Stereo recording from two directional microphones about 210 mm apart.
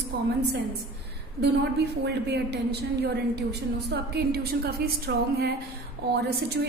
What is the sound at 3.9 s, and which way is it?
A woman's voice, 50° right (ahead or behind).